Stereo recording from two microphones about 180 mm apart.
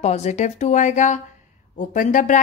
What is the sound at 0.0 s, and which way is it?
A woman's voice, 40° left (ahead or behind).